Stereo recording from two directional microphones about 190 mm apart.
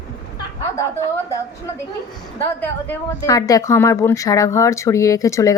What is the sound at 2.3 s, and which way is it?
A woman's voice, 10° left (ahead or behind).